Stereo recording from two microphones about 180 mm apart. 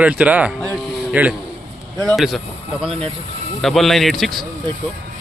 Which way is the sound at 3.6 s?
Centre (ahead or behind).